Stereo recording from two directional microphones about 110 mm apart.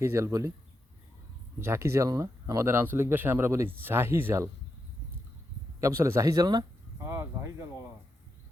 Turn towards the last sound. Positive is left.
turn(degrees=-25)  # may be behind; listen again after turning